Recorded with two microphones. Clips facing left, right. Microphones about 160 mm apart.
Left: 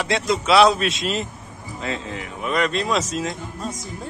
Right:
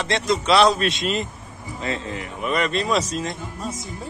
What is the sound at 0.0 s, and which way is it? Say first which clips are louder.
A man's voice: even; 5° left (ahead or behind).